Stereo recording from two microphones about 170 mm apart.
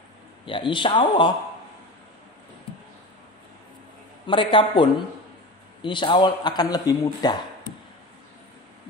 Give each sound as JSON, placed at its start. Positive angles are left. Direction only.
{"t": 0.5, "sound": "a man's voice", "side_deg": 30}
{"t": 4.3, "sound": "a man's voice", "side_deg": 30}